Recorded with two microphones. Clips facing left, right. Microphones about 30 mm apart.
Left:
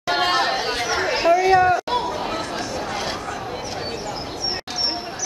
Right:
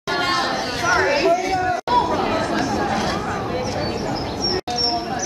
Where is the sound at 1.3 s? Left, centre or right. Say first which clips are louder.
Left 4 dB; left.